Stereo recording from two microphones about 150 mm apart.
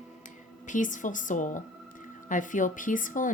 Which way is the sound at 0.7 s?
60° left (ahead or behind).